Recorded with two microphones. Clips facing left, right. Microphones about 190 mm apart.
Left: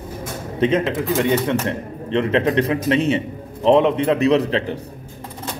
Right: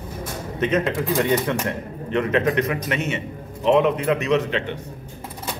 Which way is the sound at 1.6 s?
30° left (ahead or behind).